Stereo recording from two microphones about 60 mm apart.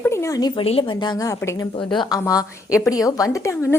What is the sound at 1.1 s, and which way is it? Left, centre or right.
A woman's voice, left.